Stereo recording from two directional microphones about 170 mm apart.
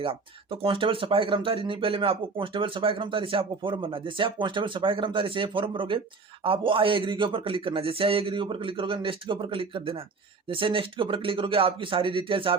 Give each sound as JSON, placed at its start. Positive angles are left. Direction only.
{"t": 0.0, "sound": "speech", "side_deg": -30}